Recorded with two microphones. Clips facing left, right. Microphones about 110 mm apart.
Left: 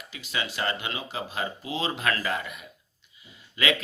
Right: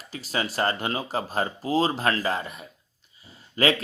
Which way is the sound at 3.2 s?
35° right (ahead or behind).